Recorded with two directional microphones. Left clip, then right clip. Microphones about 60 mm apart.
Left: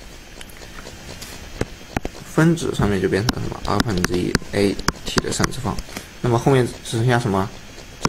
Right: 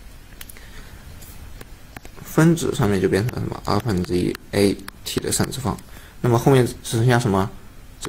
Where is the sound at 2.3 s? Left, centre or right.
Right.